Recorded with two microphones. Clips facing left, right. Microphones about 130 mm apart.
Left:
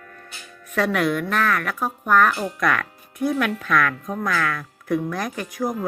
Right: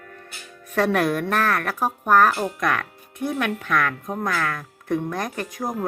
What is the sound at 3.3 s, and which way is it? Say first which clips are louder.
A woman's voice: left 2 dB; 20° right (ahead or behind).